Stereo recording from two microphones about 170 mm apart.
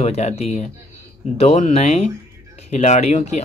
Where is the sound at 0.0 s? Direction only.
40° left (ahead or behind).